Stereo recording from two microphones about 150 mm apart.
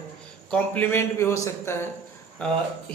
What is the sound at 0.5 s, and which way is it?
A man's voice, 10° left (ahead or behind).